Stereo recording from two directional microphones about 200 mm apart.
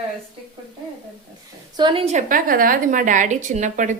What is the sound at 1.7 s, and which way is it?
A woman's voice, 25° right (ahead or behind).